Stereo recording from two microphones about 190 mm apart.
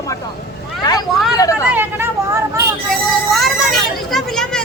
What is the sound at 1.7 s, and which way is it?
Speech, 10° right (ahead or behind).